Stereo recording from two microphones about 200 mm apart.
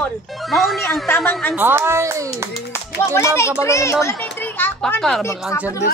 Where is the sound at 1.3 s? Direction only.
Centre (ahead or behind).